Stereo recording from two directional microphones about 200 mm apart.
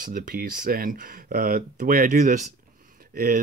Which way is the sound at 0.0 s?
45° right (ahead or behind).